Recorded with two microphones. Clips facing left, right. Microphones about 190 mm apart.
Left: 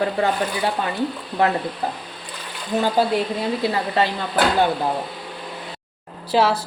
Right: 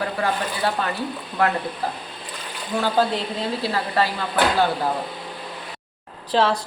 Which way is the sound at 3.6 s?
20° left (ahead or behind).